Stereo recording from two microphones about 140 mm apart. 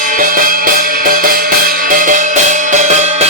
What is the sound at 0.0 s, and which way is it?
Music, 80° right.